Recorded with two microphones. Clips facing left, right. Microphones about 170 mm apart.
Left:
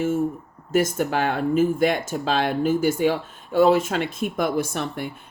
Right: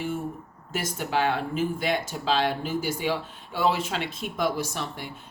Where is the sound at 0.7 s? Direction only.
50° left (ahead or behind).